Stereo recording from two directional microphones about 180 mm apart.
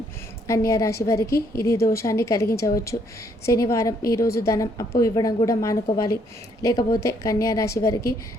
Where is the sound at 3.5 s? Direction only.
15° left (ahead or behind).